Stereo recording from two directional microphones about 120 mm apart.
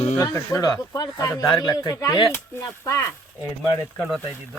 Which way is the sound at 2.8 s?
25° left (ahead or behind).